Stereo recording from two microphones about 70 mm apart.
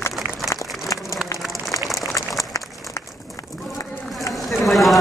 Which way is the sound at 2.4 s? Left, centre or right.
Left.